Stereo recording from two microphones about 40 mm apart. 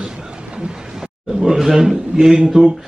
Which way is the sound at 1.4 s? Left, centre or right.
Centre.